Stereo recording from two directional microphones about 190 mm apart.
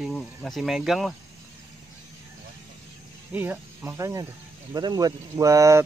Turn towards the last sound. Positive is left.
turn(degrees=-15)  # may be behind; listen again after turning